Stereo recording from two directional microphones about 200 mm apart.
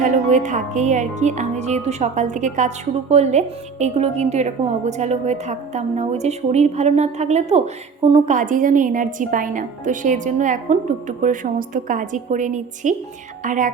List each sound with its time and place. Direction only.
0.0 s speech: 40° right (ahead or behind)